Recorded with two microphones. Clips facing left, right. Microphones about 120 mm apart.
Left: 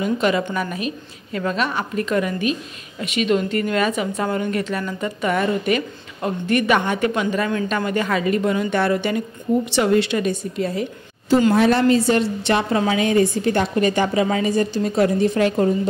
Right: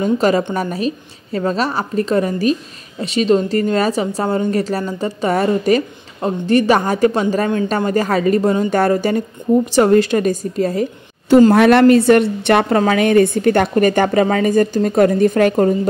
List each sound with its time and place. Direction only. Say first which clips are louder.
0.0 s speech: right 5 dB; 35° right (ahead or behind)
11.5 s a woman's voice: right 6 dB; 70° right (ahead or behind); by 15.9 s 50° right (ahead or behind)